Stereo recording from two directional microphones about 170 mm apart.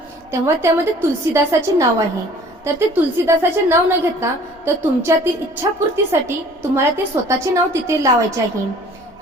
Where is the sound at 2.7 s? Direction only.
15° right (ahead or behind).